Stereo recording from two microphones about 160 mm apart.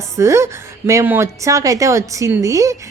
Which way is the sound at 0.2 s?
20° right (ahead or behind).